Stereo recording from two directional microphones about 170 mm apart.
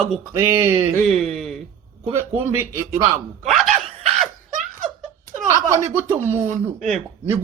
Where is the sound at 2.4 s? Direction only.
15° right (ahead or behind).